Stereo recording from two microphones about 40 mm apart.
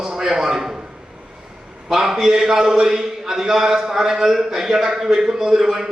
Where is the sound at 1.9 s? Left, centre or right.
Centre.